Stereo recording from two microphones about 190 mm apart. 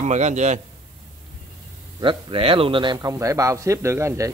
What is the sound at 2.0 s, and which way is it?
A man's voice, 25° right (ahead or behind).